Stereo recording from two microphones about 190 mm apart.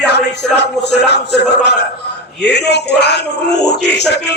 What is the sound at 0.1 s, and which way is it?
A man's voice, 65° left (ahead or behind).